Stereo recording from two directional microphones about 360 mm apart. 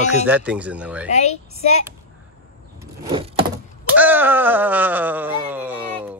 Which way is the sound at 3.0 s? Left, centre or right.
Centre.